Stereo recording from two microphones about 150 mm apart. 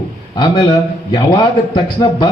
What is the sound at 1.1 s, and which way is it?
A man's voice, 30° left (ahead or behind).